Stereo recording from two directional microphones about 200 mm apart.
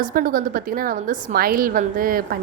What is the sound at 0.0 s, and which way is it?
A woman's voice, 45° right (ahead or behind).